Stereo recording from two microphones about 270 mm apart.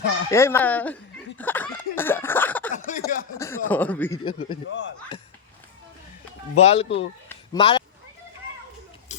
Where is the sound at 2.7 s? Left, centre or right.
Left.